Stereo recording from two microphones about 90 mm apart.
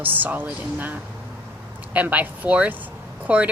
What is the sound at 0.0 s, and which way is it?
Speech, 20° right (ahead or behind).